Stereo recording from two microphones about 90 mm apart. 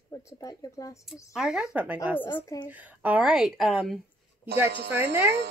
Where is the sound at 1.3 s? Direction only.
5° right (ahead or behind).